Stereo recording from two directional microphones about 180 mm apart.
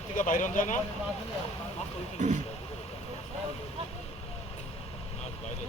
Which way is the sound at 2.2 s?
45° right (ahead or behind).